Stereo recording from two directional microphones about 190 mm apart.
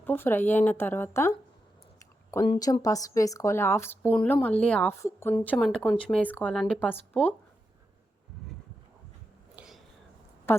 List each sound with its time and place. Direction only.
0.0 s a woman's voice: 10° left (ahead or behind)
2.0 s a sound: 15° left (ahead or behind)
2.5 s a woman's voice: 25° left (ahead or behind); by 6.9 s 5° left (ahead or behind)
9.6 s whispering: centre (ahead or behind)